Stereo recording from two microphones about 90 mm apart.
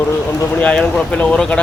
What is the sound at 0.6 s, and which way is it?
Speech, 10° left (ahead or behind).